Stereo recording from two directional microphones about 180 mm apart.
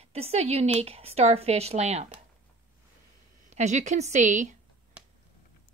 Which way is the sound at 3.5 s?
40° right (ahead or behind).